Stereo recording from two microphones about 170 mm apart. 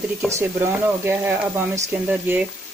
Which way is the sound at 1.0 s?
10° right (ahead or behind).